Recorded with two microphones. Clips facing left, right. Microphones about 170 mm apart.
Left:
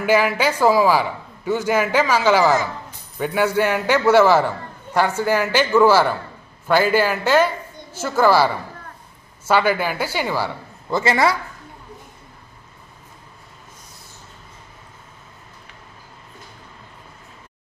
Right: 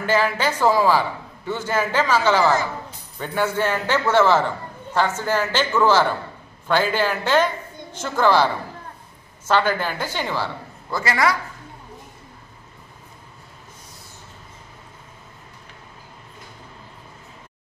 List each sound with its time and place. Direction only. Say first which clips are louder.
0.0 s a man's voice: left 3 dB; 10° left (ahead or behind)
9.5 s a man's voice: left 2 dB; 10° left (ahead or behind)
10.9 s a man's voice: left 3 dB; 25° left (ahead or behind)